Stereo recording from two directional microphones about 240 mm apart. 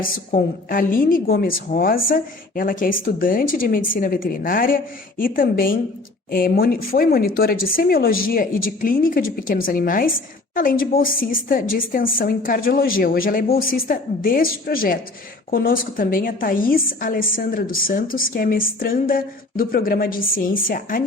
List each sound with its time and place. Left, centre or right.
0.0 s a woman's voice: left